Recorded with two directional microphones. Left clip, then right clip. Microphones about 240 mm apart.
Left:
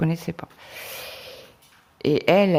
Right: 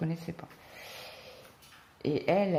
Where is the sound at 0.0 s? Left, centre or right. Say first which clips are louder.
Left 10 dB; left.